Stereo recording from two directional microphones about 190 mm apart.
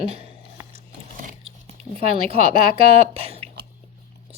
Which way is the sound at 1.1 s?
45° right (ahead or behind).